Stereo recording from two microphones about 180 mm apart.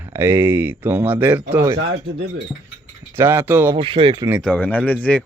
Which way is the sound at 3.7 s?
25° right (ahead or behind).